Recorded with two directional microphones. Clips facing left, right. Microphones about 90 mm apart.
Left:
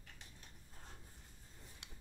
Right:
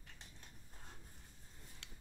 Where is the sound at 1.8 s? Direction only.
15° left (ahead or behind).